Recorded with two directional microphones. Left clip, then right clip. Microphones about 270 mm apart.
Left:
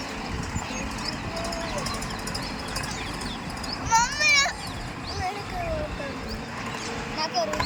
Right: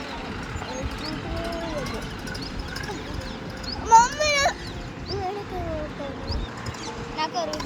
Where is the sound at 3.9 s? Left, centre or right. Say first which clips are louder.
Right 4 dB; right.